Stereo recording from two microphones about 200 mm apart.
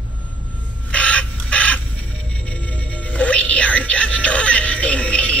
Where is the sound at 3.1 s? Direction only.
5° left (ahead or behind).